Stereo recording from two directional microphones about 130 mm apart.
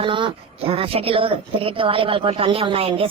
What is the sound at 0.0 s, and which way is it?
Speech, 40° right (ahead or behind).